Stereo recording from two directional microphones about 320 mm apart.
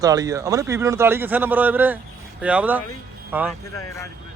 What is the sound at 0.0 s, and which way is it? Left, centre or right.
A man's voice, centre.